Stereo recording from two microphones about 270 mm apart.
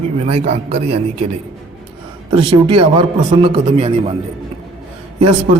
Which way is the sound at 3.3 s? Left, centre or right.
Right.